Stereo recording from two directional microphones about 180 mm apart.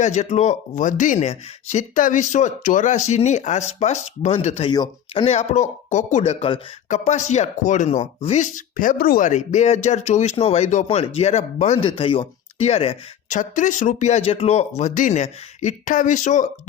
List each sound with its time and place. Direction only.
0.0 s speech: 40° left (ahead or behind)
4.7 s speech: 25° left (ahead or behind); by 16.5 s 45° left (ahead or behind)